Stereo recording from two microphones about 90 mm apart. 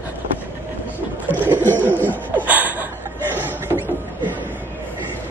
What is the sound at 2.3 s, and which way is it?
Laughter, 20° right (ahead or behind).